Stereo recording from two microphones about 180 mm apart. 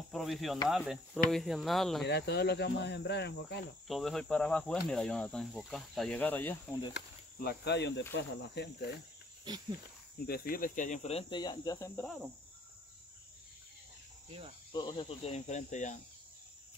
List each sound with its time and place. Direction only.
0.1 s speech: centre (ahead or behind)
0.7 s cricket: centre (ahead or behind)
2.0 s cricket: 65° left (ahead or behind)
3.8 s cricket: centre (ahead or behind)
7.4 s cricket: 70° left (ahead or behind)
10.2 s speech: 55° left (ahead or behind); by 12.1 s 15° left (ahead or behind)
14.7 s speech: 25° left (ahead or behind); by 16.0 s 40° left (ahead or behind)